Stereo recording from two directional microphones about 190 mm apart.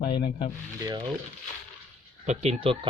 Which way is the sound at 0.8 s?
20° right (ahead or behind).